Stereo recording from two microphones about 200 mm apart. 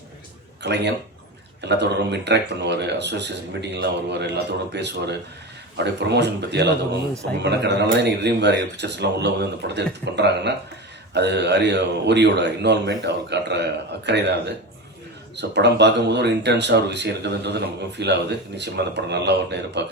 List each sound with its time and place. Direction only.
0.6 s speech: 60° right (ahead or behind)